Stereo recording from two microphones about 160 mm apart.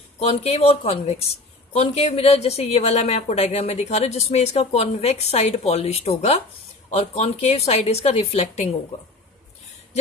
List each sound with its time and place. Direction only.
0.2 s a woman's voice: 40° left (ahead or behind)